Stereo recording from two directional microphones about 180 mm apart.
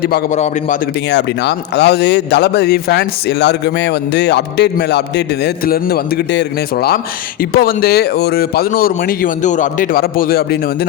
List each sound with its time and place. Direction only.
0.3 s a man's voice: 40° left (ahead or behind)
1.1 s a man's voice: 70° left (ahead or behind)